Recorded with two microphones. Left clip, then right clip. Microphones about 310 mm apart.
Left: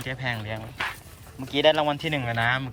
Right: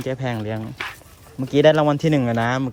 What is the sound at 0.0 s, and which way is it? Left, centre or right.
Speech, right.